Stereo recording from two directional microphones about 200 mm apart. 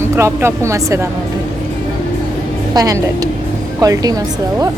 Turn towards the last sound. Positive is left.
turn(degrees=-20)  # may be behind; listen again after turning